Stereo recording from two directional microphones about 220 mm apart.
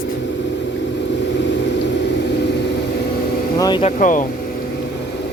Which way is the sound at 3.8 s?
35° left (ahead or behind).